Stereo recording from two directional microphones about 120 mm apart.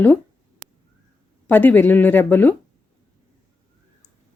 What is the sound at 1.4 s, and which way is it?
Speech, 15° left (ahead or behind).